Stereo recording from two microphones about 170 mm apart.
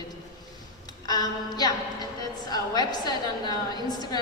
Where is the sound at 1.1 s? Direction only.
25° left (ahead or behind).